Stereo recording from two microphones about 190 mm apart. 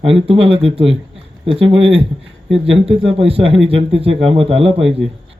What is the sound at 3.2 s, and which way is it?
Speech, 30° right (ahead or behind).